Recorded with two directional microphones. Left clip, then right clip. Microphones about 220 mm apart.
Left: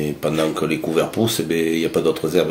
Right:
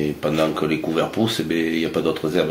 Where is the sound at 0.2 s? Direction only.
45° left (ahead or behind).